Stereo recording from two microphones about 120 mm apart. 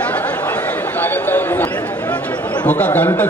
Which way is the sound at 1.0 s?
15° left (ahead or behind).